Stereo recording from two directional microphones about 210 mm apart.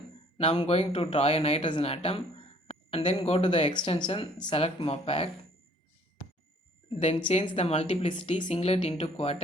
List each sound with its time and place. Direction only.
0.3 s speech: 25° left (ahead or behind)
7.3 s speech: 30° left (ahead or behind)